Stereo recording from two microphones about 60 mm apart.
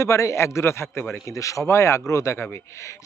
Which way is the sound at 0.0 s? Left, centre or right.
Left.